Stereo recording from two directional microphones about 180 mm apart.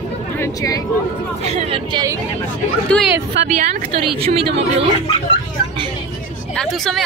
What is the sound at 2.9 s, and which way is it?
Speech, 5° left (ahead or behind).